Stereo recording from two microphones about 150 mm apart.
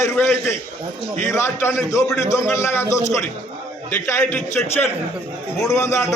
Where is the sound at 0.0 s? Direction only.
20° left (ahead or behind).